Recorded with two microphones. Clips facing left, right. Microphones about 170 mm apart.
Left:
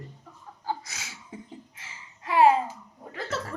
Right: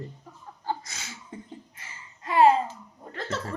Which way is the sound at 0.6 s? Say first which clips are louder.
Right 1 dB; 5° left (ahead or behind).